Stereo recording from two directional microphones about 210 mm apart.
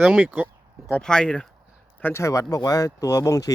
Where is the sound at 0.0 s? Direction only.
10° right (ahead or behind).